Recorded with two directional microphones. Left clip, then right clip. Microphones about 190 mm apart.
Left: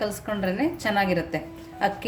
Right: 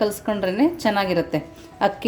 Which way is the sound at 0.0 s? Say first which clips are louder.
Right 5 dB; 35° right (ahead or behind).